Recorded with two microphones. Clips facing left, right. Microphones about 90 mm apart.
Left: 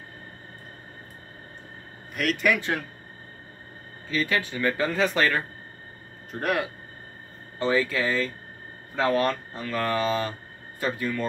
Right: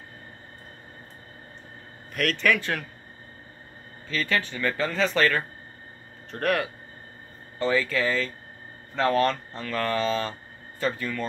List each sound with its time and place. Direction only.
2.1 s speech: 10° left (ahead or behind)
4.1 s speech: 15° left (ahead or behind)